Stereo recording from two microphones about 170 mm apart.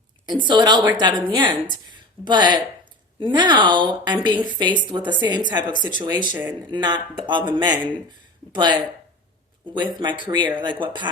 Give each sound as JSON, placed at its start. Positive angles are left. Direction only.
{"t": 0.4, "sound": "a woman's voice", "side_deg": -25}